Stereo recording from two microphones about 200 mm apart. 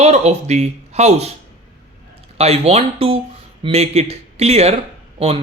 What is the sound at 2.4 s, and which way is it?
Speech, 30° right (ahead or behind).